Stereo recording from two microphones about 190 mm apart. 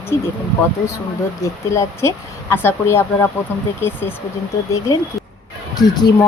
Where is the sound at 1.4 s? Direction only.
15° left (ahead or behind).